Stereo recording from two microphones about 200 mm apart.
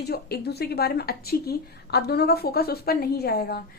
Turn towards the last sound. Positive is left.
turn(degrees=50)  # may be behind; listen again after turning